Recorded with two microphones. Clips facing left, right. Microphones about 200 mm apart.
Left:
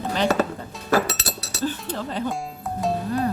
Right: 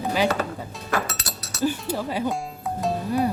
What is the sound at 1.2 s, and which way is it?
Chink, 30° left (ahead or behind).